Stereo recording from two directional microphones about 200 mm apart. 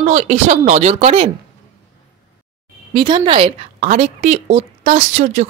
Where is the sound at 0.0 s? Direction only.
35° right (ahead or behind).